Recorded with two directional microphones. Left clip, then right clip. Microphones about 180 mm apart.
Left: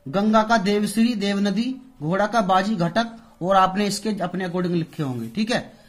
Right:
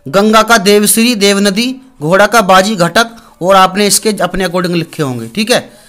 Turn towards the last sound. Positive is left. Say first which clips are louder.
# right 13 dB
turn(degrees=-30)  # may be behind; listen again after turning